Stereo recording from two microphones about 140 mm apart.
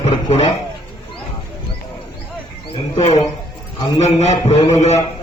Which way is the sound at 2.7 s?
45° left (ahead or behind).